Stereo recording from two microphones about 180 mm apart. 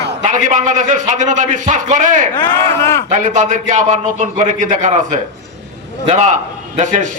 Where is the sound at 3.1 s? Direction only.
45° right (ahead or behind).